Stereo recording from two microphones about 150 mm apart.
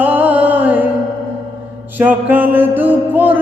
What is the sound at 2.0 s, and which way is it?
Mantra, 10° right (ahead or behind).